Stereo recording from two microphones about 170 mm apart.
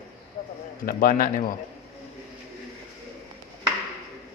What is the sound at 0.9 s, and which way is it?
Speech, 55° left (ahead or behind).